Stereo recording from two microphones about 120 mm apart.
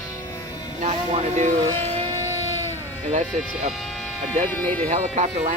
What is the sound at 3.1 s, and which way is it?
Speech, 70° right (ahead or behind).